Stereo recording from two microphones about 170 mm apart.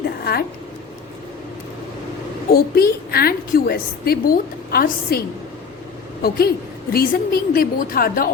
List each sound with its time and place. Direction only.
2.5 s a woman's voice: 60° left (ahead or behind)
6.2 s a woman's voice: 65° left (ahead or behind)